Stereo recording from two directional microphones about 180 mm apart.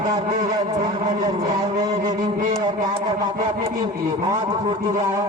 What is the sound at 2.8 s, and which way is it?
A man's voice, 25° right (ahead or behind).